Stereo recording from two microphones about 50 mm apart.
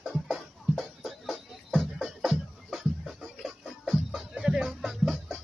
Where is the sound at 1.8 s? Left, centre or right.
Centre.